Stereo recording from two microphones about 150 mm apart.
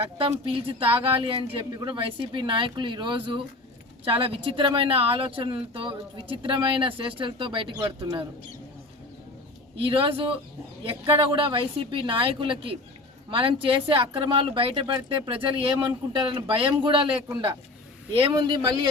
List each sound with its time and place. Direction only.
0.2 s a woman's voice: 35° right (ahead or behind)
9.8 s a woman's voice: 35° right (ahead or behind)
18.2 s speech: 30° right (ahead or behind)